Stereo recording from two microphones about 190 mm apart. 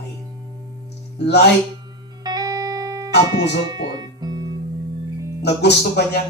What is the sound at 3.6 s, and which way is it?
Guitar, 20° right (ahead or behind).